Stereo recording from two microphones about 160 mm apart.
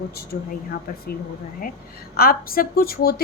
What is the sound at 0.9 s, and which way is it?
Speech, 65° left (ahead or behind).